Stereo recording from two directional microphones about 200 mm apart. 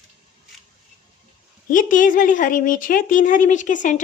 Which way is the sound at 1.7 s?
40° left (ahead or behind).